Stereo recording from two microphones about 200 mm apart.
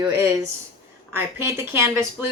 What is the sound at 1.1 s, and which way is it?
Speech, 10° right (ahead or behind).